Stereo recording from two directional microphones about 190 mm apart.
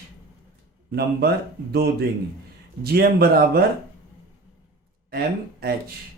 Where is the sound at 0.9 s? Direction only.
55° right (ahead or behind).